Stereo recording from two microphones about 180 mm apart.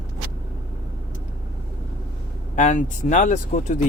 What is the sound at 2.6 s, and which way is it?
Speech, 45° left (ahead or behind).